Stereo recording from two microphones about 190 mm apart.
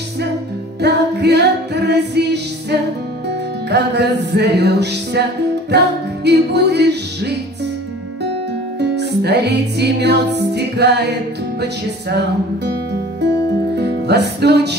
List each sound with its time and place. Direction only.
0.7 s music: 60° right (ahead or behind)
8.7 s music: 60° right (ahead or behind)
13.7 s music: 60° right (ahead or behind)